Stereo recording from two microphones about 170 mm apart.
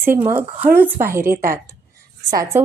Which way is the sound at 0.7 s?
10° right (ahead or behind).